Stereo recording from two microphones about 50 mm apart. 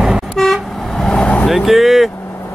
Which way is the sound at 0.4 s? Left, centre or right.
Centre.